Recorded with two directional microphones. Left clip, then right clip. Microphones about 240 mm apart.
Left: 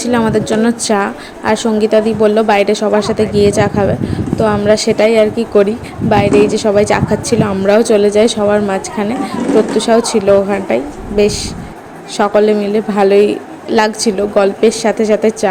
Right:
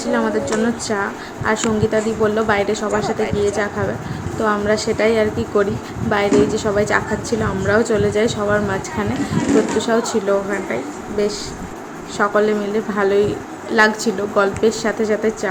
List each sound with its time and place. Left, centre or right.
0.0 s a woman's voice: left
12.1 s a woman's voice: left